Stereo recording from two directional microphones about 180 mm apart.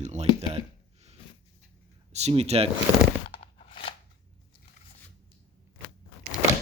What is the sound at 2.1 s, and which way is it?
Speech, 35° right (ahead or behind).